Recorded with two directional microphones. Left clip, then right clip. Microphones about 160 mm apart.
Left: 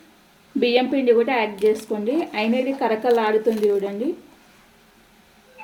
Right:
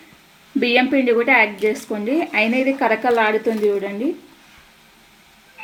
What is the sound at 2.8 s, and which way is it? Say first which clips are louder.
A woman's voice: right 2 dB; 20° right (ahead or behind).